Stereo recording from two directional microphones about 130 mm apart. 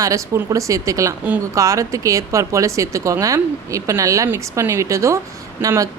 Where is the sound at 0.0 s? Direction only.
25° right (ahead or behind).